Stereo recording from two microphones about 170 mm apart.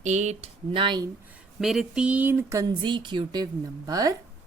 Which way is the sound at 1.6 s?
5° right (ahead or behind).